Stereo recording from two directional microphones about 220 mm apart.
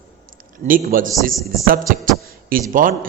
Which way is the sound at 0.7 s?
40° right (ahead or behind).